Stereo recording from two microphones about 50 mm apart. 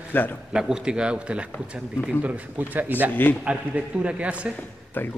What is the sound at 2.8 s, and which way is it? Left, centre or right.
A man's voice, right.